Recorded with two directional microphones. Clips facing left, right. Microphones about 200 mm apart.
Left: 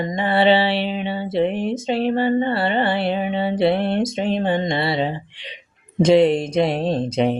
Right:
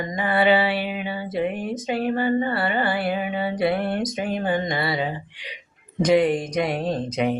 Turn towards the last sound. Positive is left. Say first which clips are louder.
# left 4 dB
turn(degrees=30)  # may be behind; listen again after turning